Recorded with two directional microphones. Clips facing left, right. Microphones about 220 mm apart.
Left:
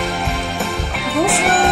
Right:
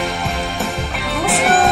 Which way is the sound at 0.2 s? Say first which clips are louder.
Even; centre (ahead or behind).